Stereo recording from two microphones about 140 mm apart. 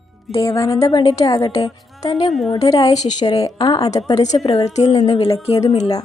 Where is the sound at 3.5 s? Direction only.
40° left (ahead or behind).